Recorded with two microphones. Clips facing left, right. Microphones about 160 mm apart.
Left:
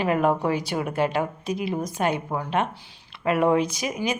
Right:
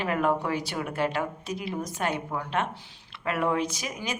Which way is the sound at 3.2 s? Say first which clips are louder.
Left 6 dB; 20° left (ahead or behind).